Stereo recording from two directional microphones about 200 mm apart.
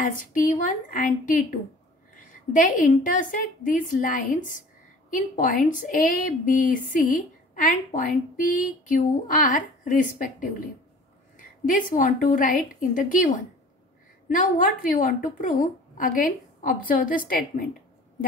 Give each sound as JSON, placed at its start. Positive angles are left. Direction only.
{"t": 0.0, "sound": "a woman's voice", "side_deg": 40}
{"t": 11.3, "sound": "a woman's voice", "side_deg": 40}